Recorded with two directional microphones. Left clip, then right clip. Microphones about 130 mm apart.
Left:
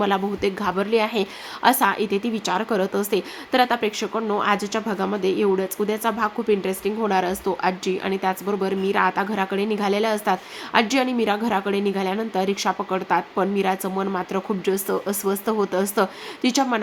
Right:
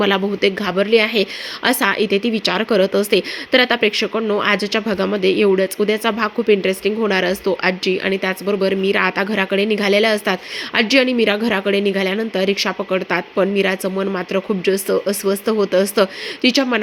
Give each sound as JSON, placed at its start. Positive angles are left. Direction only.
{"t": 0.0, "sound": "a woman's voice", "side_deg": -20}